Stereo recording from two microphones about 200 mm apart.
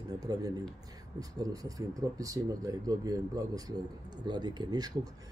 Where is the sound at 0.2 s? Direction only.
20° right (ahead or behind).